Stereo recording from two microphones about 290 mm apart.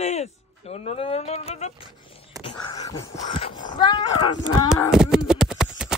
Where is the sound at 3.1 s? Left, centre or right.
Centre.